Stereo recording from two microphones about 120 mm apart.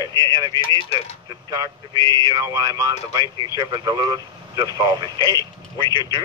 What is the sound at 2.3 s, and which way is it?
Speech, 30° right (ahead or behind).